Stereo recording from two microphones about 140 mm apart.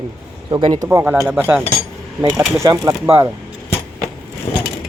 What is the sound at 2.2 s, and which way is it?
Speech, 25° right (ahead or behind).